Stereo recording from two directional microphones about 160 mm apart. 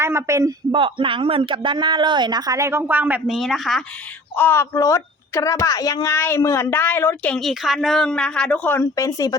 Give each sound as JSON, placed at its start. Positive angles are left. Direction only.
{"t": 0.0, "sound": "a man's voice", "side_deg": -15}
{"t": 0.7, "sound": "speech", "side_deg": -35}
{"t": 4.4, "sound": "a child's voice", "side_deg": 15}
{"t": 7.3, "sound": "a woman's voice", "side_deg": 0}